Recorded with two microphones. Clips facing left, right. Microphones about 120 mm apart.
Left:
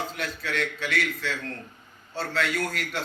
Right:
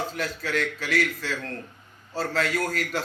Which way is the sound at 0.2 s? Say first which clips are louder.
Right 3 dB; 40° right (ahead or behind).